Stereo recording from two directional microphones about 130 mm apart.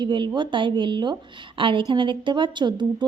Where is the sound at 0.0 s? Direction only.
40° right (ahead or behind).